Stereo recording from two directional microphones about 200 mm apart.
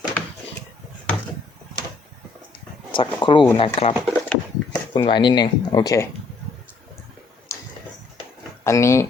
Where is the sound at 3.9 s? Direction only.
5° right (ahead or behind).